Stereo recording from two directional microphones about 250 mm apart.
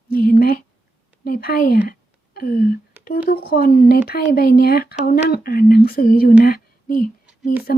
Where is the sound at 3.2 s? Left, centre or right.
Left.